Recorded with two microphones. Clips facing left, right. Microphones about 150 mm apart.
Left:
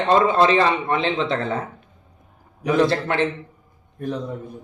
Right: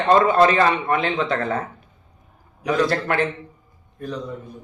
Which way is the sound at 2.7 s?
25° left (ahead or behind).